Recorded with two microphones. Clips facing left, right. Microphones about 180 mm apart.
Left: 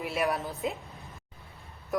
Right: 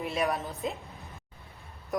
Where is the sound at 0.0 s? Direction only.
Centre (ahead or behind).